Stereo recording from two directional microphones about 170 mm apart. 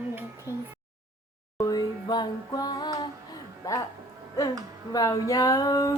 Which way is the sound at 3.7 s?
20° left (ahead or behind).